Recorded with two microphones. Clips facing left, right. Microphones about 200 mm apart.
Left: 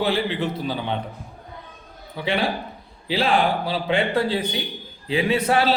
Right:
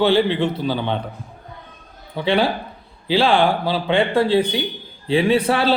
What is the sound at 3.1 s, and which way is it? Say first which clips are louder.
A man's voice: right 4 dB; 30° right (ahead or behind).